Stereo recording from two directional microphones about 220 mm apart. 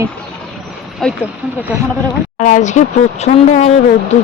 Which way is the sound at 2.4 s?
35° left (ahead or behind).